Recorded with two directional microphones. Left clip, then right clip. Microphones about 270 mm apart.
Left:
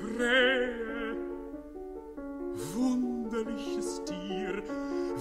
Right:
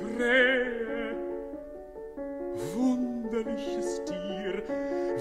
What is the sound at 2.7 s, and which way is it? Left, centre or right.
Music, left.